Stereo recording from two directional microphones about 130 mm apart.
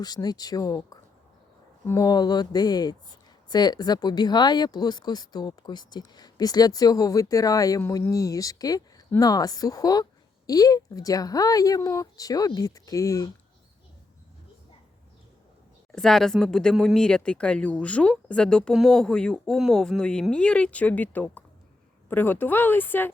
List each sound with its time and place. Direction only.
0.0 s speech: 30° left (ahead or behind)
15.9 s speech: 5° left (ahead or behind)